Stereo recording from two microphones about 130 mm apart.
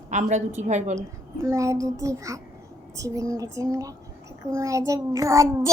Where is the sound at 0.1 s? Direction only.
65° right (ahead or behind).